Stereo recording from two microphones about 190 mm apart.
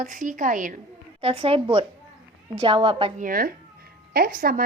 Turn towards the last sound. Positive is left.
turn(degrees=-50)  # may be behind; listen again after turning